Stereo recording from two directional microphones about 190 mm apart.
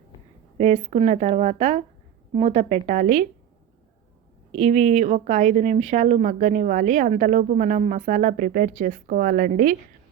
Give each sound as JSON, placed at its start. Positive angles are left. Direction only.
{"t": 0.6, "sound": "speech", "side_deg": -35}
{"t": 4.5, "sound": "speech", "side_deg": -40}